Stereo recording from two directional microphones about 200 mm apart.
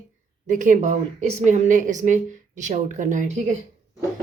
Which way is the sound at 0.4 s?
40° right (ahead or behind).